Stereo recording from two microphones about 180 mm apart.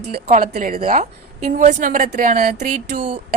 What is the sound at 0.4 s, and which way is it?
A woman's voice, 50° right (ahead or behind).